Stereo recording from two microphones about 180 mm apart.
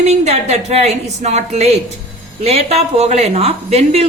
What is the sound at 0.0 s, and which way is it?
Speech, 35° right (ahead or behind).